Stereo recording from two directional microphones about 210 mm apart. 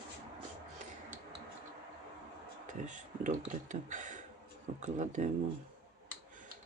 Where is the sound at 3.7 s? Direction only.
35° right (ahead or behind).